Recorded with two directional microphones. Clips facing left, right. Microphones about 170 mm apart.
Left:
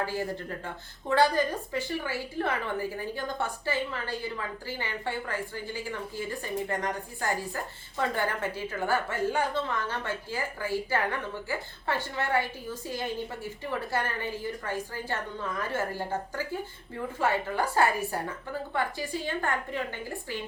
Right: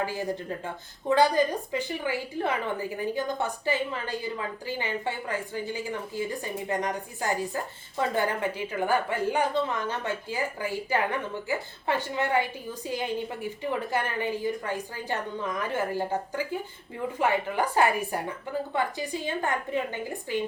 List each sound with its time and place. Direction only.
0.0 s a woman's voice: 15° right (ahead or behind)